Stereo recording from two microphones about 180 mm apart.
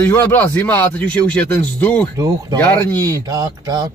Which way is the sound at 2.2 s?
20° right (ahead or behind).